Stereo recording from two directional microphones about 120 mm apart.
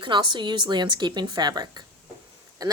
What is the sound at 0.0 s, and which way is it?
A woman's voice, 40° right (ahead or behind).